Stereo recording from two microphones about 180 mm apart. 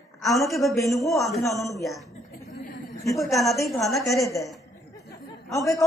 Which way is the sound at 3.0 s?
15° left (ahead or behind).